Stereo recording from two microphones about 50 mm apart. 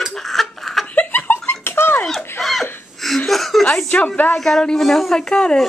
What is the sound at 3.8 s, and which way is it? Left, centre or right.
Speech, left.